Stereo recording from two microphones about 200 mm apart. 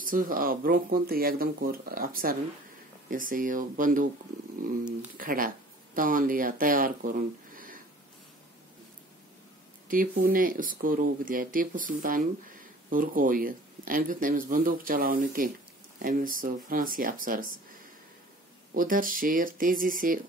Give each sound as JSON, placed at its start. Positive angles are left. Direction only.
{"t": 0.0, "sound": "speech", "side_deg": -45}
{"t": 5.1, "sound": "speech", "side_deg": -45}
{"t": 9.8, "sound": "speech", "side_deg": -45}
{"t": 18.7, "sound": "speech", "side_deg": -45}